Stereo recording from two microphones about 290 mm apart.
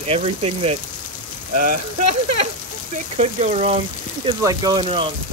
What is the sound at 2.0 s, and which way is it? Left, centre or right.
Speech, right.